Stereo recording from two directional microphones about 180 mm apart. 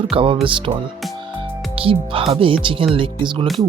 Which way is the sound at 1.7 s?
30° right (ahead or behind).